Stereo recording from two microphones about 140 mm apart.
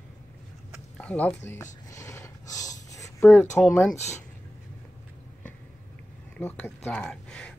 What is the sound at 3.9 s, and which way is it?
Speech, 55° left (ahead or behind).